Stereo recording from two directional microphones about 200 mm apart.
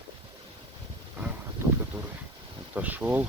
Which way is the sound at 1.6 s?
10° right (ahead or behind).